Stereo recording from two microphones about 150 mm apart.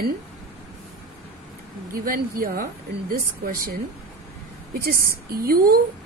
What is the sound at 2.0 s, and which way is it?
Speech, 70° right (ahead or behind).